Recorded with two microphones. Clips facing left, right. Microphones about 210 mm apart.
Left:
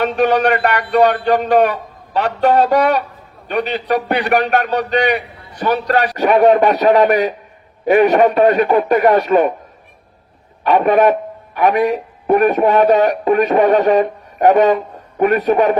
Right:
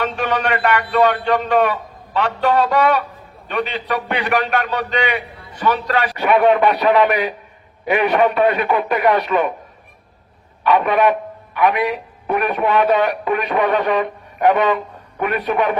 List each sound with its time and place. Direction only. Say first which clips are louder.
0.2 s a man's voice: left 8 dB; 40° left (ahead or behind)
10.6 s a man's voice: left 3 dB; 45° left (ahead or behind)